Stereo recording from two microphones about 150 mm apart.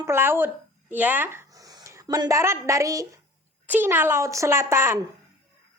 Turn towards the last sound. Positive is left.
turn(degrees=-15)  # may be behind; listen again after turning